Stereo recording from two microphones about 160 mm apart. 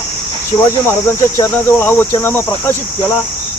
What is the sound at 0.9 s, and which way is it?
Speech, 15° left (ahead or behind).